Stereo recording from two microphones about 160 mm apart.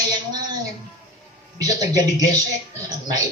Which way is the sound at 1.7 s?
20° right (ahead or behind).